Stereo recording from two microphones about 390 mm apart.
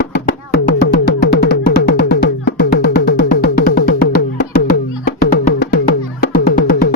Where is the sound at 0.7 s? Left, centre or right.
Left.